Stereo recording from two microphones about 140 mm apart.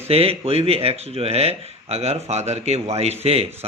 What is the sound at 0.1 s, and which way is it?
Speech, 45° right (ahead or behind).